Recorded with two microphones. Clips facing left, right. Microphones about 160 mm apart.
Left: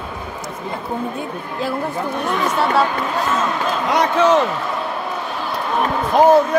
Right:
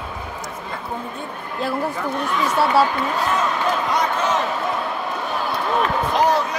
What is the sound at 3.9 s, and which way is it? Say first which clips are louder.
Speech: left 6 dB; 75° left (ahead or behind).